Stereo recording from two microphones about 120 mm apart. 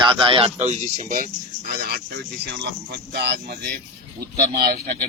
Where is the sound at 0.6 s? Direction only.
80° right.